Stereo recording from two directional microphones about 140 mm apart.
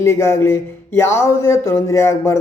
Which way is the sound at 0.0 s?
20° left (ahead or behind).